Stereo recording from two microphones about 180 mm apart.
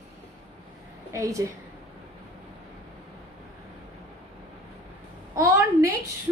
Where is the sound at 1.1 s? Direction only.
15° right (ahead or behind).